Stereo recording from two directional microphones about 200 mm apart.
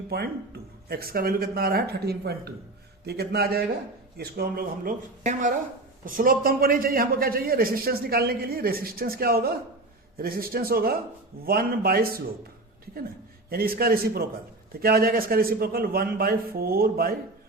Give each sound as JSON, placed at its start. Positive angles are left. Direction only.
{"t": 0.1, "sound": "a man's voice", "side_deg": -50}
{"t": 13.5, "sound": "a man's voice", "side_deg": -50}